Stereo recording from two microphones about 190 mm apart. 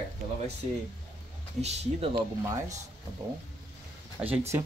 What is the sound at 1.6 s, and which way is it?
Speech, 35° right (ahead or behind).